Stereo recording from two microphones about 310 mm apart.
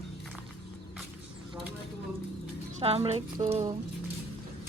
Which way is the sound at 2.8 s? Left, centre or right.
Centre.